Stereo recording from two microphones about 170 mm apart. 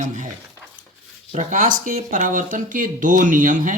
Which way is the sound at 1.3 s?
45° right (ahead or behind).